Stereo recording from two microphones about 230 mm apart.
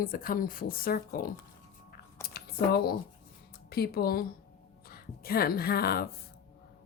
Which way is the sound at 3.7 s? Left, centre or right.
Left.